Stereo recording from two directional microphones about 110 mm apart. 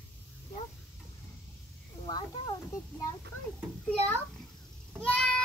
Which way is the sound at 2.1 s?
45° left (ahead or behind).